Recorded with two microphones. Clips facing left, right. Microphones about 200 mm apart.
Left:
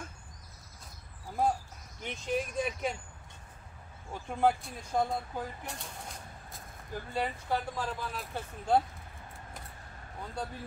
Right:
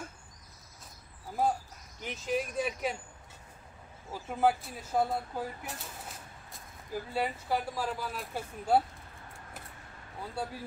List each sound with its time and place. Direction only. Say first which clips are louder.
1.4 s speech: even; 5° right (ahead or behind)
4.1 s speech: even; 5° right (ahead or behind)
10.3 s speech: right 2 dB; 10° right (ahead or behind)